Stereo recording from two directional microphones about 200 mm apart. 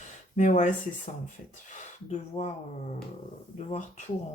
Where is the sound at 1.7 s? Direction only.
35° left (ahead or behind).